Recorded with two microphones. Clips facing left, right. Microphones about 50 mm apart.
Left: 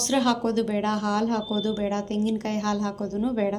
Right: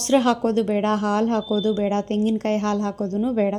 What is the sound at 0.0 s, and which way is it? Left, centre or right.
A woman's voice, right.